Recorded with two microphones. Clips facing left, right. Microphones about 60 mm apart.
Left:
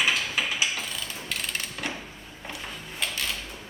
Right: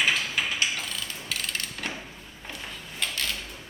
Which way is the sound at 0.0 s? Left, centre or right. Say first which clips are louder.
Even; centre.